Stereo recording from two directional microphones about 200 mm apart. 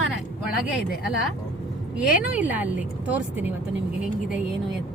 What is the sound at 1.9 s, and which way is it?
Speech, 5° right (ahead or behind).